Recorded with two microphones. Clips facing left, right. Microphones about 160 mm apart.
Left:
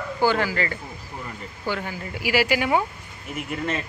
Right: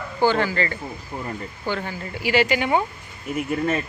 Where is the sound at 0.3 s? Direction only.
10° left (ahead or behind).